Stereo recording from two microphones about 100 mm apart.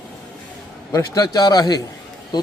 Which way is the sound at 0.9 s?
35° left (ahead or behind).